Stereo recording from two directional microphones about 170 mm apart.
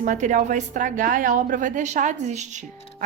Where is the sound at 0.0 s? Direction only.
45° right (ahead or behind).